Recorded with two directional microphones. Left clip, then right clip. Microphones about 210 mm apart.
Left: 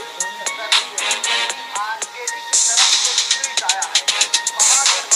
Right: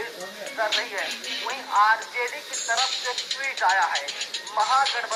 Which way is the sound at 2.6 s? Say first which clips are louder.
Left 8 dB; 50° left (ahead or behind).